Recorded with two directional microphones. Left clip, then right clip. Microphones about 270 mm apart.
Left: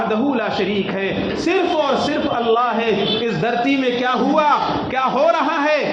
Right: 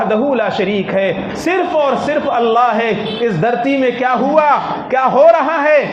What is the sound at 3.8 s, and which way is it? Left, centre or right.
A man's voice, right.